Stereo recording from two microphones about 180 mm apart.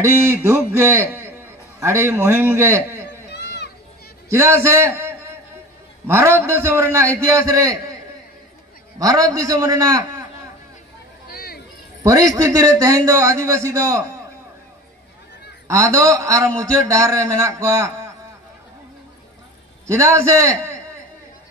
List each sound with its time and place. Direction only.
0.0 s a man's voice: 15° right (ahead or behind)
3.3 s a sound: 70° left (ahead or behind)
4.3 s a man's voice: 15° right (ahead or behind)
8.9 s a man's voice: 20° right (ahead or behind)
11.3 s a sound: 55° left (ahead or behind)
12.0 s a man's voice: 20° right (ahead or behind)
15.7 s a man's voice: 15° right (ahead or behind)
19.9 s a man's voice: 15° right (ahead or behind)